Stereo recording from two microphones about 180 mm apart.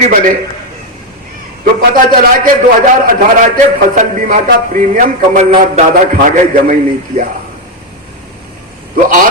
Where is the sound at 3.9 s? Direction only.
45° right (ahead or behind).